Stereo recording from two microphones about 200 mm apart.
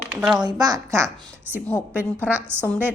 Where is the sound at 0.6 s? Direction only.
15° right (ahead or behind).